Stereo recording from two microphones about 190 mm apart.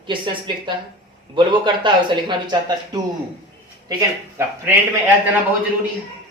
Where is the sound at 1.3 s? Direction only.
25° right (ahead or behind).